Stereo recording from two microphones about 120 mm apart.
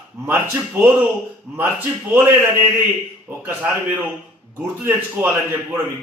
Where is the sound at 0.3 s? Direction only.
15° right (ahead or behind).